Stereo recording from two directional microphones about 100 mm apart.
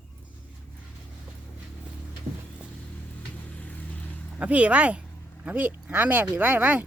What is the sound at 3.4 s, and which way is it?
Vehicle, 15° left (ahead or behind).